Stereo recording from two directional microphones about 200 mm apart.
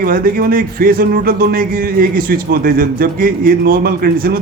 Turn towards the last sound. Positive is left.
turn(degrees=-50)  # may be behind; listen again after turning